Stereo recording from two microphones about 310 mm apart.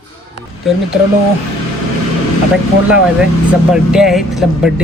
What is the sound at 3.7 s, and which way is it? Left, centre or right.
Speech, centre.